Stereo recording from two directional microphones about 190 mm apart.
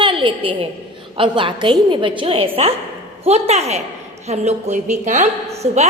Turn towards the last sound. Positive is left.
turn(degrees=-35)  # may be behind; listen again after turning